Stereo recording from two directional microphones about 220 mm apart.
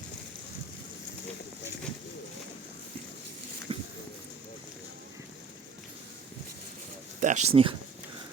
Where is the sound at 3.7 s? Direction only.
25° right (ahead or behind).